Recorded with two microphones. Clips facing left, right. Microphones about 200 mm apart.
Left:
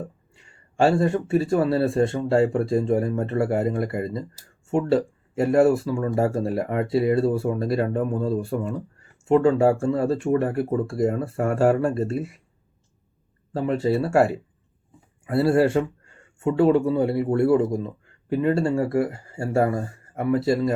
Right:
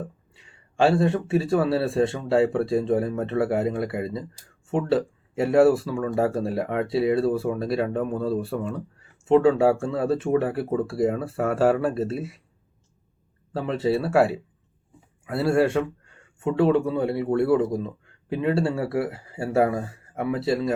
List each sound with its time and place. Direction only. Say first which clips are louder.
0.8 s speech: left 1 dB; centre (ahead or behind)
8.2 s speech: left 1 dB; 20° left (ahead or behind)
9.3 s speech: even; 5° right (ahead or behind)
13.6 s speech: left 2 dB; centre (ahead or behind)